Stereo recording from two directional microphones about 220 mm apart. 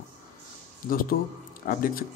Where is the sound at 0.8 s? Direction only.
40° left (ahead or behind).